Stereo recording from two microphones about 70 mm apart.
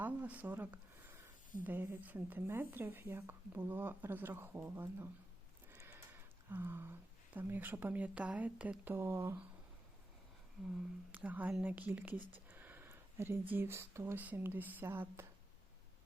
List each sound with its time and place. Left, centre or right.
0.0 s speech: right
6.6 s speech: right
8.8 s speech: right
11.1 s speech: right
14.2 s speech: right